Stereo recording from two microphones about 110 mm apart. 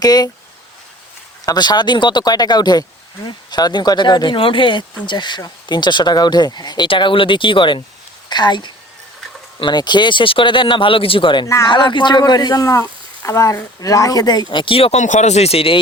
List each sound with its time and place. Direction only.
0.0 s speech: 40° left (ahead or behind)
1.5 s speech: 40° left (ahead or behind); by 15.8 s 60° left (ahead or behind)